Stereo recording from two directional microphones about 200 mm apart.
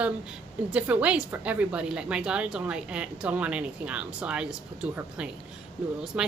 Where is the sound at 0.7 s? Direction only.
5° right (ahead or behind).